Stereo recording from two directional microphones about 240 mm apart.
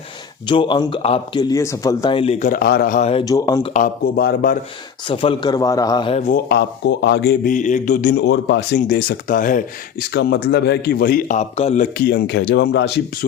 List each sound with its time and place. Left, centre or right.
0.4 s a man's voice: centre
3.7 s a man's voice: left
5.0 s a man's voice: left